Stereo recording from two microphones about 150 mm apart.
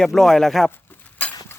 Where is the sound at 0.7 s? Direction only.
10° left (ahead or behind).